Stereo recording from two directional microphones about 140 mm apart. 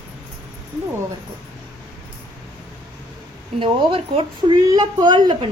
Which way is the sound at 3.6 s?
35° right (ahead or behind).